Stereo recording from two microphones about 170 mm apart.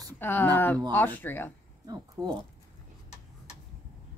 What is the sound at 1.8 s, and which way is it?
Speech, 25° right (ahead or behind).